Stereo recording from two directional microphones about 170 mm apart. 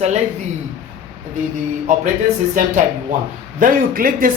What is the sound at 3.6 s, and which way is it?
Speech, 55° right (ahead or behind).